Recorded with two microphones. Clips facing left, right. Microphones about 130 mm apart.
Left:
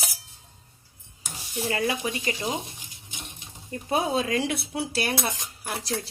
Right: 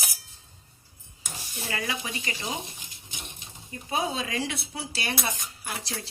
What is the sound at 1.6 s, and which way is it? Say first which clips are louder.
Speech: left 6 dB; 40° left (ahead or behind).